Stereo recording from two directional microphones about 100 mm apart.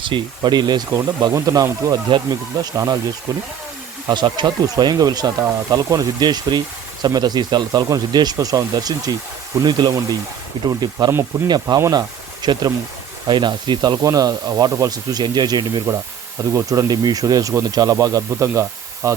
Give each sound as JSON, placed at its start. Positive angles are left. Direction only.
{"t": 0.0, "sound": "speech", "side_deg": -50}
{"t": 1.3, "sound": "speech", "side_deg": -35}
{"t": 2.0, "sound": "speech", "side_deg": -55}
{"t": 2.6, "sound": "speech", "side_deg": -35}
{"t": 4.1, "sound": "speech", "side_deg": -50}